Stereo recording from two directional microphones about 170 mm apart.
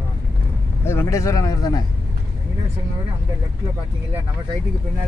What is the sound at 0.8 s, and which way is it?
Speech, 15° left (ahead or behind).